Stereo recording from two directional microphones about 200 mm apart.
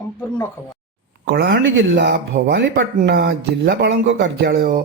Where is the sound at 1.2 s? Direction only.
60° right (ahead or behind).